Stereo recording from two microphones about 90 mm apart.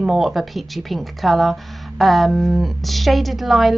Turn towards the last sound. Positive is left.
turn(degrees=0)  # may be behind; listen again after turning